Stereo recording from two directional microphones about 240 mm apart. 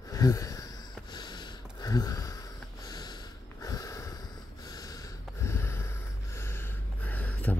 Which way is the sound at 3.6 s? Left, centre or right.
Centre.